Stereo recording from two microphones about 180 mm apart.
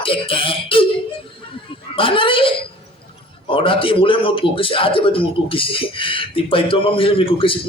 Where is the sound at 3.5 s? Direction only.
30° left (ahead or behind).